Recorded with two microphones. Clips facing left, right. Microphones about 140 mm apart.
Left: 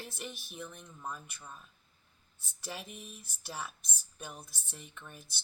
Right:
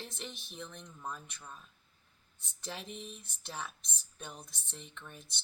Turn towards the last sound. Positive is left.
turn(degrees=5)  # may be behind; listen again after turning